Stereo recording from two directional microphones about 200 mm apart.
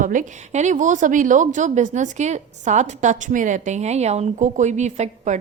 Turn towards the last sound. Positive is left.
turn(degrees=-35)  # may be behind; listen again after turning